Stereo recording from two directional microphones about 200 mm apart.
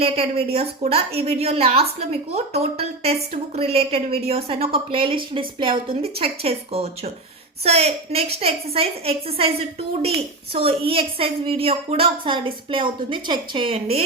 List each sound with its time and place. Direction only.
0.0 s a woman's voice: 30° right (ahead or behind)